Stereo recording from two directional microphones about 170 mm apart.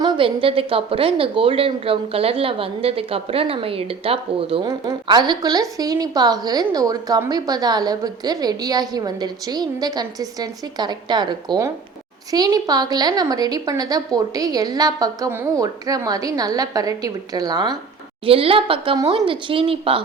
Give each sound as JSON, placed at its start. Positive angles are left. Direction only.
{"t": 0.0, "sound": "a woman's voice", "side_deg": -30}